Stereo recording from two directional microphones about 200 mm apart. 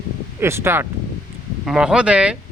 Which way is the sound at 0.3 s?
10° right (ahead or behind).